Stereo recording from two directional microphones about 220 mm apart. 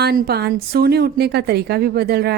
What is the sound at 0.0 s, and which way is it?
A woman's voice, 45° right (ahead or behind).